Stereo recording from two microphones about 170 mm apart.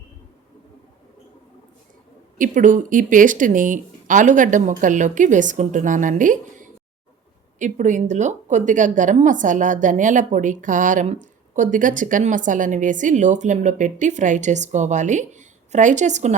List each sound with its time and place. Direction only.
2.4 s a woman's voice: 50° right (ahead or behind)